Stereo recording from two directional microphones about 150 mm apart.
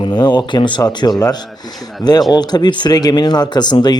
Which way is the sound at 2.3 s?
30° left (ahead or behind).